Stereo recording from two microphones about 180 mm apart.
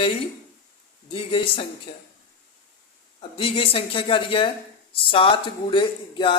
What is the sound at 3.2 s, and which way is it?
A man's voice, 30° left (ahead or behind).